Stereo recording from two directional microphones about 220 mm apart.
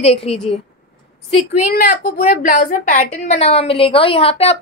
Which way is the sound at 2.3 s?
40° left (ahead or behind).